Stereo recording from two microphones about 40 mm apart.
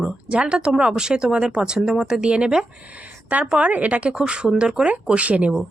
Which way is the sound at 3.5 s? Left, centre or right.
Right.